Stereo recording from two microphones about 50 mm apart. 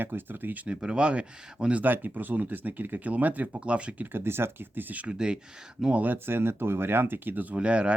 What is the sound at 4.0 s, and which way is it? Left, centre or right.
Speech, right.